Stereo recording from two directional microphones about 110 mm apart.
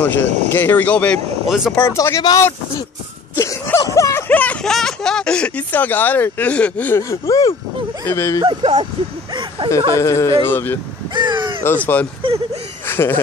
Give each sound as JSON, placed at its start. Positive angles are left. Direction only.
{"t": 0.0, "sound": "speech", "side_deg": 15}
{"t": 1.8, "sound": "speech", "side_deg": 25}
{"t": 4.3, "sound": "speech", "side_deg": 15}
{"t": 7.0, "sound": "speech", "side_deg": 30}
{"t": 8.5, "sound": "speech", "side_deg": -50}
{"t": 9.3, "sound": "a sound", "side_deg": -45}
{"t": 9.7, "sound": "speech", "side_deg": 25}
{"t": 11.1, "sound": "crow", "side_deg": -45}
{"t": 11.6, "sound": "speech", "side_deg": 15}